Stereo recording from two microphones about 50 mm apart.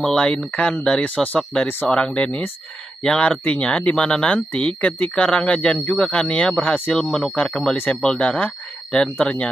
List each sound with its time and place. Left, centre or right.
0.0 s speech: centre
1.0 s speech: left